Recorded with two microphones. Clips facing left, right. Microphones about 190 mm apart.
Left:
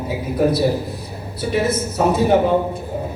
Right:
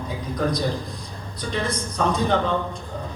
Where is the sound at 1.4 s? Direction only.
20° left (ahead or behind).